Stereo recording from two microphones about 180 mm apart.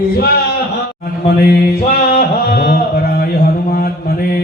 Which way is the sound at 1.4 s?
55° left (ahead or behind).